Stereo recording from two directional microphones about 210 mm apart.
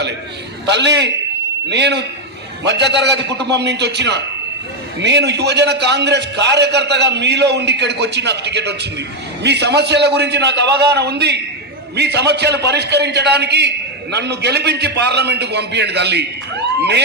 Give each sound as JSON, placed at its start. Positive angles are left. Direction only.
{"t": 0.6, "sound": "a man's voice", "side_deg": -55}